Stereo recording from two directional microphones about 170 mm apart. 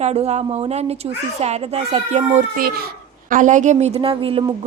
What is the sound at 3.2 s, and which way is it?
A woman's voice, 50° right (ahead or behind).